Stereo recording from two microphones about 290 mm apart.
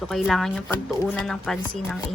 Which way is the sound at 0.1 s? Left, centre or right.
Centre.